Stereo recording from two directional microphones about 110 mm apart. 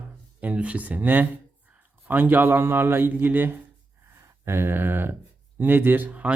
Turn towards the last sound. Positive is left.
turn(degrees=-15)  # may be behind; listen again after turning